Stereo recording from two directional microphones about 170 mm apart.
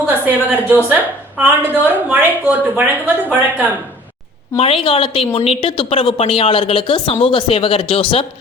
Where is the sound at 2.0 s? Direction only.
10° right (ahead or behind).